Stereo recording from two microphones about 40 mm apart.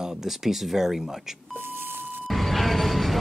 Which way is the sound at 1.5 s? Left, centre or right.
Right.